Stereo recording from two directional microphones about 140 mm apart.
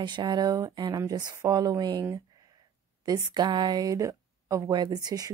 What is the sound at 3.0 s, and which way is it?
A woman's voice, 30° right (ahead or behind).